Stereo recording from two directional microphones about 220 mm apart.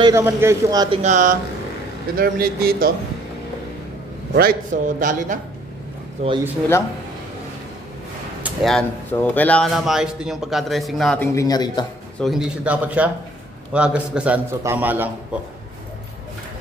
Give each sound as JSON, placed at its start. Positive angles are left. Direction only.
{"t": 0.0, "sound": "speech", "side_deg": -10}
{"t": 4.3, "sound": "a man's voice", "side_deg": -45}
{"t": 8.4, "sound": "speech", "side_deg": -5}
{"t": 11.3, "sound": "a man's voice", "side_deg": 15}
{"t": 12.2, "sound": "a man's voice", "side_deg": 0}